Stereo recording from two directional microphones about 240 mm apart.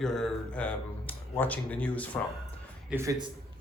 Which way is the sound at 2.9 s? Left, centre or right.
Centre.